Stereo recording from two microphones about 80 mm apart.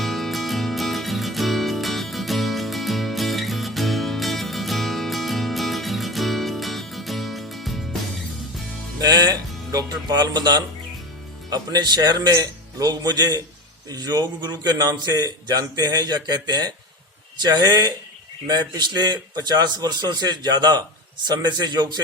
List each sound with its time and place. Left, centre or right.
0.0 s music: centre
9.0 s music: right
11.5 s a man's voice: right